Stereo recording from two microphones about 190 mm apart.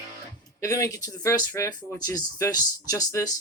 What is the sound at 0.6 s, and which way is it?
Speech, 15° left (ahead or behind).